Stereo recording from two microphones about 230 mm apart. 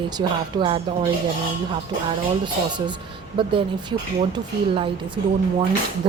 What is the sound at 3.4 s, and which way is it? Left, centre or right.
Speech, centre.